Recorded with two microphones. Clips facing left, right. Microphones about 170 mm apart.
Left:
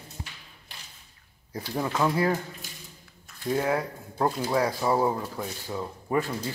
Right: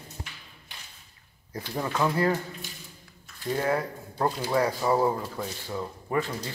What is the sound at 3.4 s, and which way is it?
Speech, 5° left (ahead or behind).